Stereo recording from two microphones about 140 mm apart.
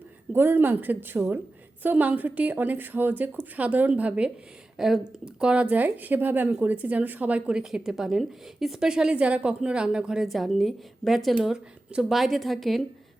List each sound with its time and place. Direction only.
0.3 s a woman's voice: 15° right (ahead or behind); by 12.8 s centre (ahead or behind)